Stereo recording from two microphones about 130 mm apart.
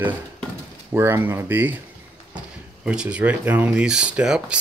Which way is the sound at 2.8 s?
10° right (ahead or behind).